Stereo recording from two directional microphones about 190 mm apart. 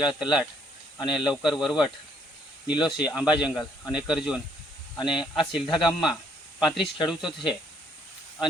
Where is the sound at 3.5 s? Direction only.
20° left (ahead or behind).